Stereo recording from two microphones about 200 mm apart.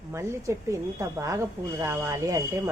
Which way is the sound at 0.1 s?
15° right (ahead or behind).